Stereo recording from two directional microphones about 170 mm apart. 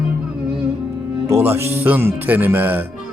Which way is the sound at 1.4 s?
15° right (ahead or behind).